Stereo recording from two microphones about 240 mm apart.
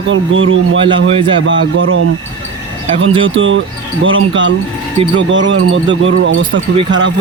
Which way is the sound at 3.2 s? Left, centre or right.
Right.